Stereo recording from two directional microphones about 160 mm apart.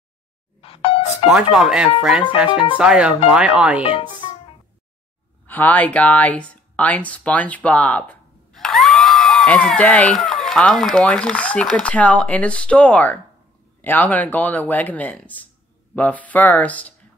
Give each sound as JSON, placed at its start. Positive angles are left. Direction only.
{"t": 0.6, "sound": "music", "side_deg": 35}
{"t": 1.3, "sound": "speech", "side_deg": -5}
{"t": 3.8, "sound": "speech", "side_deg": 30}
{"t": 5.5, "sound": "speech", "side_deg": 10}